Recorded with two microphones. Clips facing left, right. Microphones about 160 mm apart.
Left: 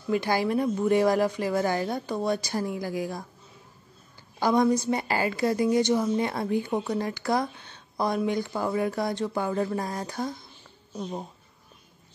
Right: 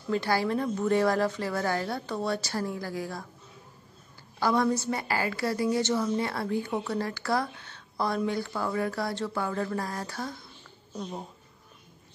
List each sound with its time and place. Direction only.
0.1 s a woman's voice: 15° left (ahead or behind)
4.4 s a woman's voice: 15° left (ahead or behind)